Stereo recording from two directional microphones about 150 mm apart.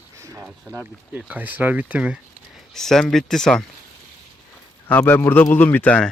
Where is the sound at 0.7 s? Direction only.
10° right (ahead or behind).